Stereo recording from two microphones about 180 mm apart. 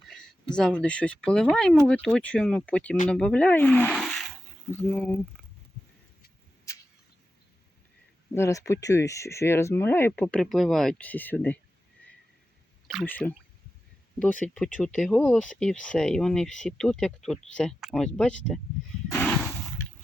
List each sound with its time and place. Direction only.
0.0 s a sound: 5° left (ahead or behind)
0.5 s speech: 5° left (ahead or behind)
6.7 s vehicle: 20° left (ahead or behind)
8.4 s speech: 15° left (ahead or behind)
13.1 s speech: 10° left (ahead or behind)